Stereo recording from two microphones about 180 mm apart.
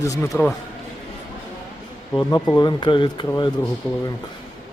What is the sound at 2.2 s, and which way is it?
Speech, 20° left (ahead or behind).